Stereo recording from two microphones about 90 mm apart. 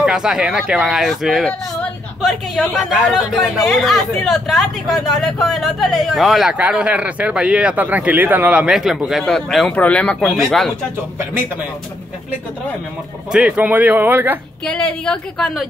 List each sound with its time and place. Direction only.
0.0 s speech: 5° right (ahead or behind)
6.5 s speech: 10° right (ahead or behind)
8.7 s speech: 5° right (ahead or behind)
9.7 s a woman's voice: 15° left (ahead or behind)
10.2 s speech: 5° left (ahead or behind)
13.3 s speech: 10° right (ahead or behind)
14.6 s a woman's voice: 10° left (ahead or behind)